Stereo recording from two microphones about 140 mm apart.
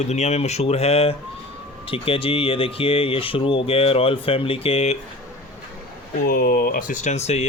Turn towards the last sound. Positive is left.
turn(degrees=50)  # may be behind; listen again after turning